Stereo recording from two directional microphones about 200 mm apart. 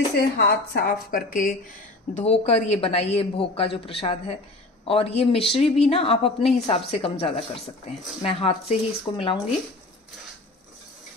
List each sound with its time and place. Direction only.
0.4 s a woman's voice: 55° left (ahead or behind); by 9.4 s 25° left (ahead or behind)